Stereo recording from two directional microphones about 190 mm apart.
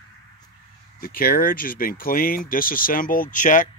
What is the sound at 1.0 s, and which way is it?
Speech, 50° left (ahead or behind).